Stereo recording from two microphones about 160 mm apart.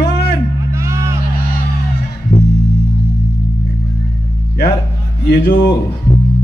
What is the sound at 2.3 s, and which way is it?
Music, 45° left (ahead or behind).